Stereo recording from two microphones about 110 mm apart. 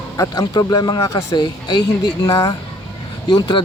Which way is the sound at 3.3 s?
45° left (ahead or behind).